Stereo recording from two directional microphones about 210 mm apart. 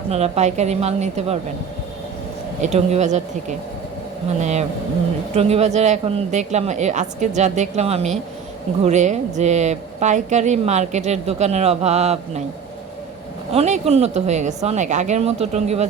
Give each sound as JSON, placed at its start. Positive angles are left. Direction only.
{"t": 0.1, "sound": "a woman's voice", "side_deg": -30}
{"t": 2.6, "sound": "a woman's voice", "side_deg": -30}
{"t": 4.4, "sound": "a woman's voice", "side_deg": -35}
{"t": 13.5, "sound": "a woman's voice", "side_deg": -30}